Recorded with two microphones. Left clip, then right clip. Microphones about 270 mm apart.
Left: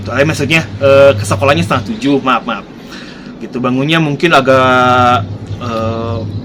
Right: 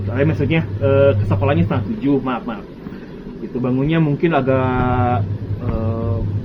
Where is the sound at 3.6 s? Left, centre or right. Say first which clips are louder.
Left 7 dB; left.